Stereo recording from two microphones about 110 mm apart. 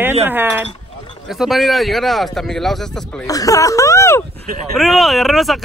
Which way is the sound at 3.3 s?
30° left (ahead or behind).